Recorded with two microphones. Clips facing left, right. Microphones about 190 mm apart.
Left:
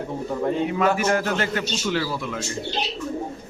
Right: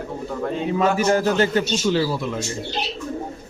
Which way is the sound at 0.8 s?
30° right (ahead or behind).